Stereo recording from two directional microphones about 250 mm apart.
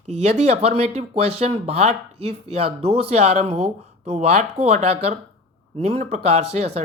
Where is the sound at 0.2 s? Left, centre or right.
Right.